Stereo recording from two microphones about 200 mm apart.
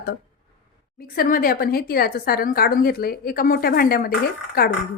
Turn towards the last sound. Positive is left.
turn(degrees=45)  # may be behind; listen again after turning